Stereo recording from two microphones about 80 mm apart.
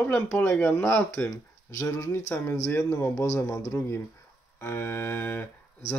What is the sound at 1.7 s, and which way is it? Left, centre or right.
Speech, left.